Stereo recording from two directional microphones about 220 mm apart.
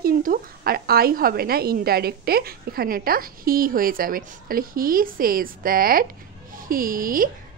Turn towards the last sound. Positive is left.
turn(degrees=-40)  # may be behind; listen again after turning